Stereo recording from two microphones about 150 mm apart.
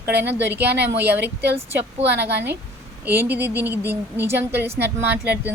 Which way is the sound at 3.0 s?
15° right (ahead or behind).